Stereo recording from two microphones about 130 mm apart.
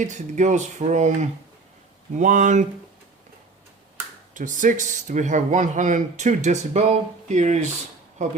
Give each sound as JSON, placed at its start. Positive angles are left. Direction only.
{"t": 0.0, "sound": "speech", "side_deg": -70}
{"t": 4.4, "sound": "speech", "side_deg": -80}